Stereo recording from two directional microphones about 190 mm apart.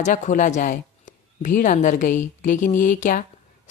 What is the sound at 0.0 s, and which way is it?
A woman's voice, 40° left (ahead or behind).